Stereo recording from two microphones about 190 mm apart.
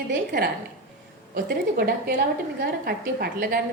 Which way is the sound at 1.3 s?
50° right (ahead or behind).